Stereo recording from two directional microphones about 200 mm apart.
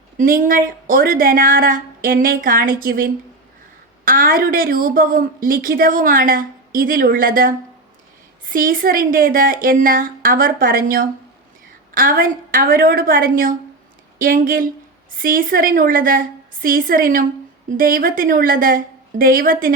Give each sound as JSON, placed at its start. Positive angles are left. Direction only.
{"t": 0.2, "sound": "a woman's voice", "side_deg": -45}